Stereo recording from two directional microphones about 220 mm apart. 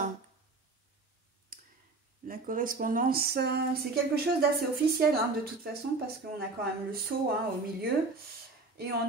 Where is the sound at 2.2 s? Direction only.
40° right (ahead or behind).